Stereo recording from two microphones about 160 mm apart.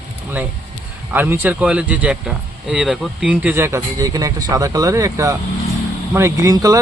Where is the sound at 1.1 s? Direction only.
10° right (ahead or behind).